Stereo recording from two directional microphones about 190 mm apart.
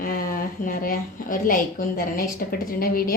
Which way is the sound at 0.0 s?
45° left (ahead or behind).